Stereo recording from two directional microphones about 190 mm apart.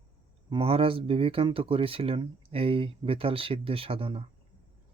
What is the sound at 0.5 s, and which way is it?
Speech, 30° right (ahead or behind).